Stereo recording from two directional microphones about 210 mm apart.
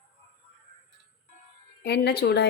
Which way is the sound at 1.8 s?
50° left (ahead or behind).